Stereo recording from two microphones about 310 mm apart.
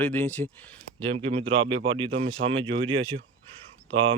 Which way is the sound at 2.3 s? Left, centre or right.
Right.